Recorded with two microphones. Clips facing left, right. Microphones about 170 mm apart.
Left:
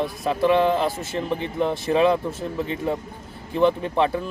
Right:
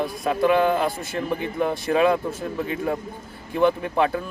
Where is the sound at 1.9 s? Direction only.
20° left (ahead or behind).